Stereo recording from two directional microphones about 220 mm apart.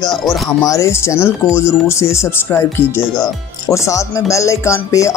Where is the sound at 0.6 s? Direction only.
15° left (ahead or behind).